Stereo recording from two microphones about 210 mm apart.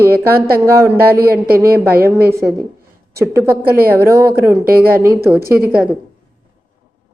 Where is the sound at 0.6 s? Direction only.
15° right (ahead or behind).